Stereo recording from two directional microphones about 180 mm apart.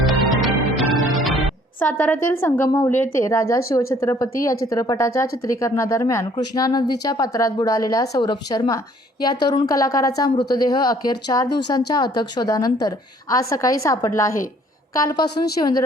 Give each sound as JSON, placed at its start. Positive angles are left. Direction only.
{"t": 0.0, "sound": "music", "side_deg": 0}
{"t": 3.2, "sound": "a woman's voice", "side_deg": 15}